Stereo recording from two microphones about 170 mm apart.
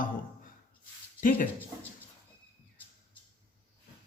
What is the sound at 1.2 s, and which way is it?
Speech, 55° left (ahead or behind).